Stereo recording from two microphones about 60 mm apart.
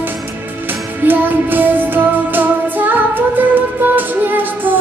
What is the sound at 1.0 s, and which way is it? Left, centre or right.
Music, right.